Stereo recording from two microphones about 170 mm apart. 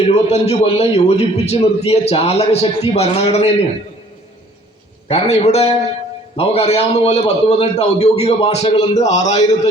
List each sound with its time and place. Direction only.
0.0 s a man's voice: 40° left (ahead or behind)
5.0 s a man's voice: 35° left (ahead or behind)